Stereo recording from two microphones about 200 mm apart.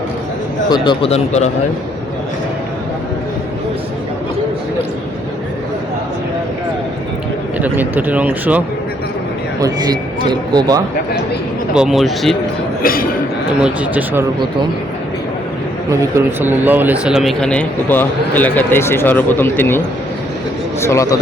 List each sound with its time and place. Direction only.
0.7 s a man's voice: 25° left (ahead or behind)
7.6 s speech: 10° right (ahead or behind)
9.6 s speech: 20° right (ahead or behind)
11.7 s speech: 5° right (ahead or behind)
12.8 s a sound: 45° left (ahead or behind)
13.6 s speech: 5° right (ahead or behind)
15.9 s speech: 15° right (ahead or behind); by 19.8 s 10° left (ahead or behind)
20.8 s speech: 15° left (ahead or behind)